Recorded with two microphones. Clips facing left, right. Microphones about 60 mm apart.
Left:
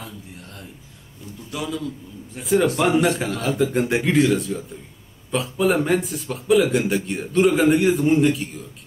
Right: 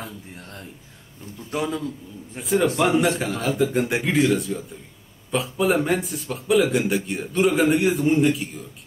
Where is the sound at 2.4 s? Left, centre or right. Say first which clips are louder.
Left 1 dB; centre.